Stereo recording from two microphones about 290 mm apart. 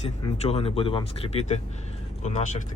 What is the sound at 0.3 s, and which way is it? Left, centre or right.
Speech, centre.